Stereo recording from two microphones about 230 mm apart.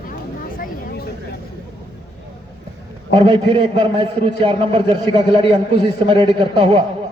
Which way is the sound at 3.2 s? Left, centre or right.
Right.